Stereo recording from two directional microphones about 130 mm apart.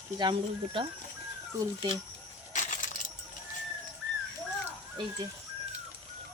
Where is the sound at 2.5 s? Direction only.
70° left (ahead or behind).